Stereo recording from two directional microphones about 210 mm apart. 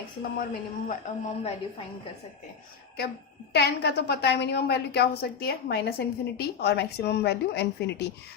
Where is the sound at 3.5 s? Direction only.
55° left (ahead or behind).